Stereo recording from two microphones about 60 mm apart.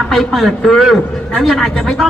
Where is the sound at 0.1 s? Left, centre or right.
Centre.